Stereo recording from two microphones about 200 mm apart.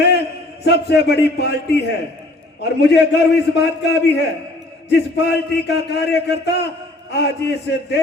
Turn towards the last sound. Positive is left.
turn(degrees=55)  # may be behind; listen again after turning